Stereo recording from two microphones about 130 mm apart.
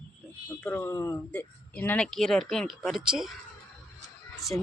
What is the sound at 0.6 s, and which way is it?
Speech, 20° left (ahead or behind).